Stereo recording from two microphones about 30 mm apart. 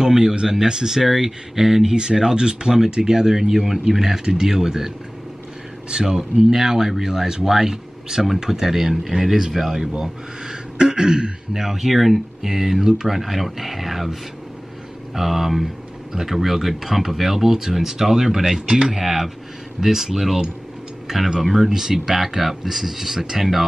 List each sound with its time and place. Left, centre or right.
0.0 s speech: right
11.5 s speech: centre
15.1 s speech: centre
21.5 s speech: centre